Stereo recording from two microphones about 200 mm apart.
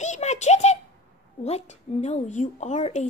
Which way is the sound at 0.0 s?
35° left (ahead or behind).